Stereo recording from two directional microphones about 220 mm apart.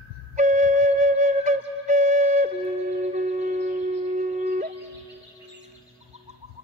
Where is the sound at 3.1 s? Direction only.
35° right (ahead or behind).